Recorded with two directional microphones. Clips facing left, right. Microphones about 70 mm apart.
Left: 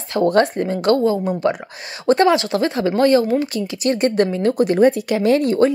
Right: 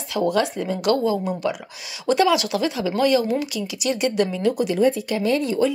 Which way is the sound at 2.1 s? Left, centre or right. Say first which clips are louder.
Left 4 dB; left.